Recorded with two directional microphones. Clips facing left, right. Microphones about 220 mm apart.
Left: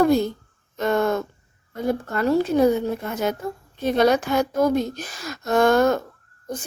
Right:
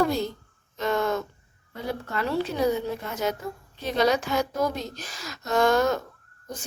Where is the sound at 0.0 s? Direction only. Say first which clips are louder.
Left 7 dB; 50° left (ahead or behind).